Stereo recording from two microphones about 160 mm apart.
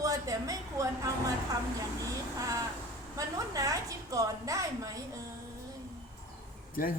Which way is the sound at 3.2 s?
20° right (ahead or behind).